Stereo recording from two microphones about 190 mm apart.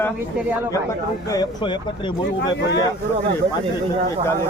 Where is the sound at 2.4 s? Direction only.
65° left (ahead or behind).